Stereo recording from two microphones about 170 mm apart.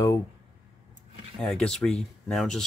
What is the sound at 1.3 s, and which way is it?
Speech, 5° left (ahead or behind).